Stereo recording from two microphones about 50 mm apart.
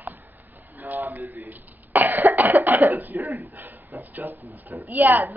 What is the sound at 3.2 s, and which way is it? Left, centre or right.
Speech, right.